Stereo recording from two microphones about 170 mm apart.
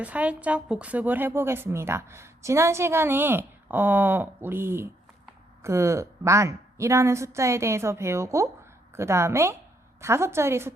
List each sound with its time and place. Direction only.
0.0 s speech: 10° right (ahead or behind)